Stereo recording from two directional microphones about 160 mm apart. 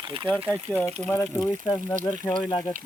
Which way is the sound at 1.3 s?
25° left (ahead or behind).